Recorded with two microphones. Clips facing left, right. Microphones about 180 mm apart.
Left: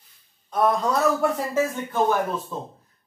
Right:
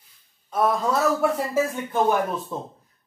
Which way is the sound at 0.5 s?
5° right (ahead or behind).